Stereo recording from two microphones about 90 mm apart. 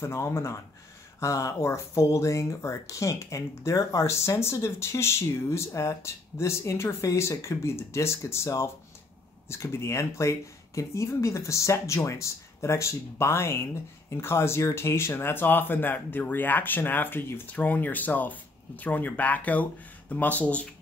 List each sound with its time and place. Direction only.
0.0 s speech: 30° left (ahead or behind); by 20.6 s 15° left (ahead or behind)